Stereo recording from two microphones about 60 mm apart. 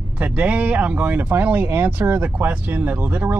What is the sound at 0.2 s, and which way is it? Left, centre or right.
Speech, right.